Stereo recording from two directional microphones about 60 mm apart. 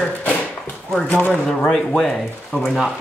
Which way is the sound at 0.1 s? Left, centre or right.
Left.